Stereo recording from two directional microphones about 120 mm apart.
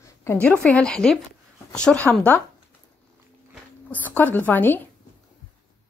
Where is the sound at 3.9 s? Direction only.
15° left (ahead or behind).